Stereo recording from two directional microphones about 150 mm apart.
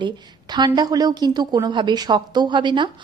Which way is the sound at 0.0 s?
30° right (ahead or behind).